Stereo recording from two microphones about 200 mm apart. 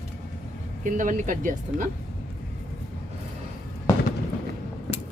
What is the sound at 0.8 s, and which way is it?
Speech, 40° right (ahead or behind).